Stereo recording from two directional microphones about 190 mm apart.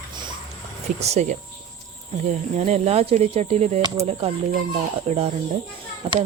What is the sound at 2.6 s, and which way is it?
Speech, 35° right (ahead or behind).